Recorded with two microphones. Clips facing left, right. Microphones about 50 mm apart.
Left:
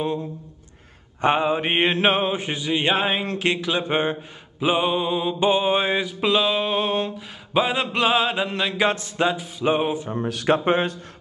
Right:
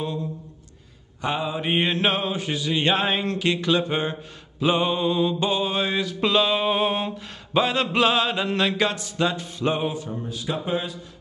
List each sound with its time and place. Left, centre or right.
1.2 s mantra: left
2.0 s mantra: left
3.7 s speech: left
4.6 s mantra: centre
6.2 s a sound: centre
7.5 s mantra: centre
8.5 s a sound: centre
8.9 s mantra: left
9.3 s mantra: centre
9.7 s mantra: left
10.1 s speech: left